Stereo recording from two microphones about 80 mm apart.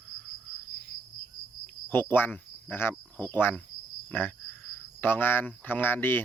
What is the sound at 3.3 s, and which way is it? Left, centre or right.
Speech, left.